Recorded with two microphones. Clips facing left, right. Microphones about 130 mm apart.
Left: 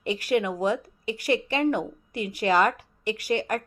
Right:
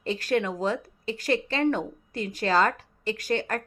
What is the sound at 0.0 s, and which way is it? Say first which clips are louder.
A woman's voice: left 1 dB; 15° left (ahead or behind).